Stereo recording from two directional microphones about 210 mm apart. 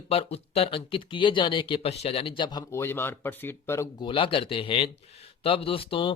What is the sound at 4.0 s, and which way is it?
Speech, 25° left (ahead or behind).